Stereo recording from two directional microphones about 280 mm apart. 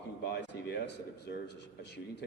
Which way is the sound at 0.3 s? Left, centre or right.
Left.